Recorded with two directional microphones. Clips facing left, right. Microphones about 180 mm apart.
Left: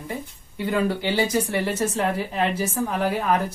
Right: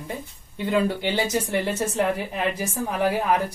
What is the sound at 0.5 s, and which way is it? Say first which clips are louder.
Speech: even; 20° right (ahead or behind).